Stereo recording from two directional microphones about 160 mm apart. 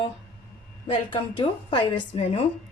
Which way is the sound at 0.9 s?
30° left (ahead or behind).